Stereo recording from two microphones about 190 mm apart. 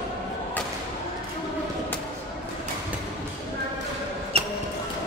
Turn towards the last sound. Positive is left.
turn(degrees=-30)  # may be behind; listen again after turning